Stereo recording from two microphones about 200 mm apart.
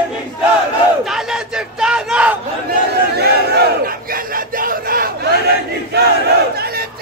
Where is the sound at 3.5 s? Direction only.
45° right (ahead or behind).